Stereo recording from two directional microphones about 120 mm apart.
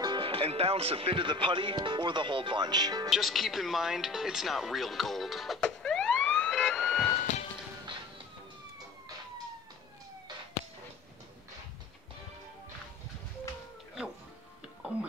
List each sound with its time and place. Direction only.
0.0 s speech: 45° right (ahead or behind)
3.1 s speech: centre (ahead or behind)
7.2 s music: 90° left